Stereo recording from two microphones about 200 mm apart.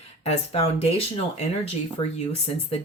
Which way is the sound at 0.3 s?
30° left (ahead or behind).